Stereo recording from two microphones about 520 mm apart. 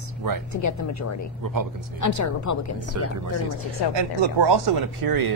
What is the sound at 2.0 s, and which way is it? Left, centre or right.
A woman's voice, left.